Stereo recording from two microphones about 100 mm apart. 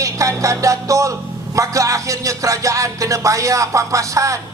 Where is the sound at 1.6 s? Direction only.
35° right (ahead or behind).